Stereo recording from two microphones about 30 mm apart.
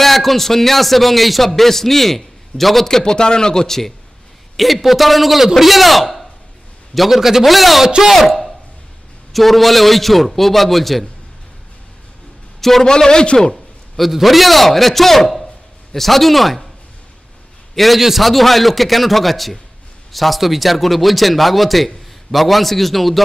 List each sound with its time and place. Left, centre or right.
0.0 s a man's voice: centre
2.9 s speech: left
4.6 s a man's voice: centre
7.1 s a man's voice: centre
7.4 s a man's voice: centre
12.5 s a sound: centre
12.8 s speech: left
14.2 s a man's voice: centre
17.7 s a man's voice: centre